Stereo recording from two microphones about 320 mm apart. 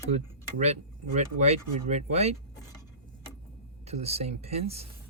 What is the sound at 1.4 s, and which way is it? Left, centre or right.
Speech, right.